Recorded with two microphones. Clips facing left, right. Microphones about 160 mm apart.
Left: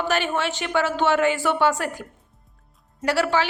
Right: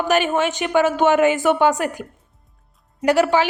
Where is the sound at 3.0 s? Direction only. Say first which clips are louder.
Right 5 dB; 15° right (ahead or behind).